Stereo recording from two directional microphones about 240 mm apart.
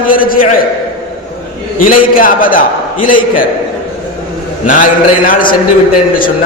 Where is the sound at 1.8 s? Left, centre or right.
Left.